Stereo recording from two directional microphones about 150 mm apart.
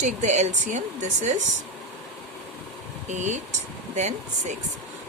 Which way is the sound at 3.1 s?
55° right (ahead or behind).